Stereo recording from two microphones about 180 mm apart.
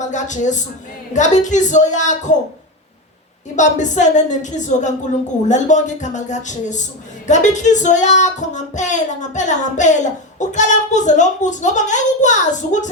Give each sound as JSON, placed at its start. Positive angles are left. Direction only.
{"t": 0.0, "sound": "a woman's voice", "side_deg": 40}
{"t": 3.5, "sound": "a woman's voice", "side_deg": 40}